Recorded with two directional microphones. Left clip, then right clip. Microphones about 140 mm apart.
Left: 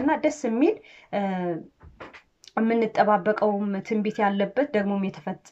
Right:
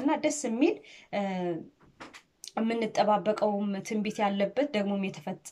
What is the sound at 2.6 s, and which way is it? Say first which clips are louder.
Speech: left 6 dB; 15° right (ahead or behind).